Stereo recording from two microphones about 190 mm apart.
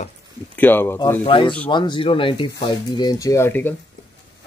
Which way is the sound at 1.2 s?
25° left (ahead or behind).